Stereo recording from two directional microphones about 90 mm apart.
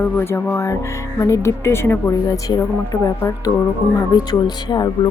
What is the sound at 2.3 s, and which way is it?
Speech, 45° left (ahead or behind).